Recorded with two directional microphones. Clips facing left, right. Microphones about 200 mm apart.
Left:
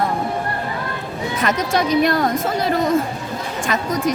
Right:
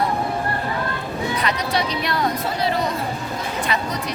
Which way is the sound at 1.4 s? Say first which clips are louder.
Left 6 dB; 45° left (ahead or behind).